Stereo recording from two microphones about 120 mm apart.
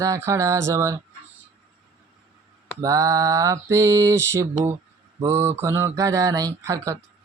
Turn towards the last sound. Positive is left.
turn(degrees=-25)  # may be behind; listen again after turning